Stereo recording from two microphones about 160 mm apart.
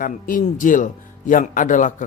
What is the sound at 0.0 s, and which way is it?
Speech, 60° left (ahead or behind).